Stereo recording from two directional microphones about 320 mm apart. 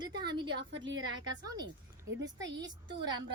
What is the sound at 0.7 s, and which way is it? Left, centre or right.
Speech, right.